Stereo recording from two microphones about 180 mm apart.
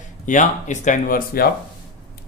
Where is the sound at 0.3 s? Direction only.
45° left (ahead or behind).